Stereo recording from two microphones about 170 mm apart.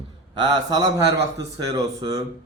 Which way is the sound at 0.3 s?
25° right (ahead or behind).